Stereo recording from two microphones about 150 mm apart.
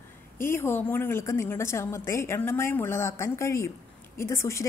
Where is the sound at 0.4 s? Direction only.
15° left (ahead or behind).